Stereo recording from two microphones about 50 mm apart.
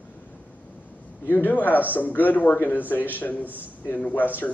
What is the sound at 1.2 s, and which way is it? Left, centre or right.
Speech, left.